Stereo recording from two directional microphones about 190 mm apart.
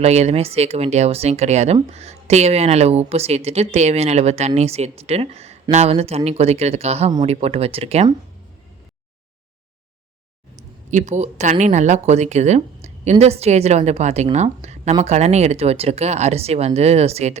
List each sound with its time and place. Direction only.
0.0 s speech: 35° right (ahead or behind)
10.6 s speech: 40° right (ahead or behind)